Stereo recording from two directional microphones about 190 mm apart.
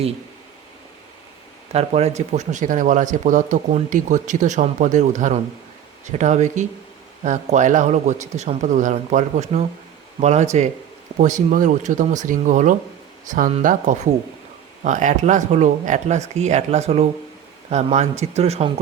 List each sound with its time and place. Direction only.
1.7 s speech: 35° right (ahead or behind)